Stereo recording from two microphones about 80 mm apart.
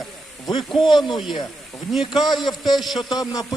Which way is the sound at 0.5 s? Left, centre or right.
Left.